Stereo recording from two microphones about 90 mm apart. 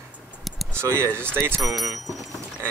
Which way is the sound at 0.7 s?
30° right (ahead or behind).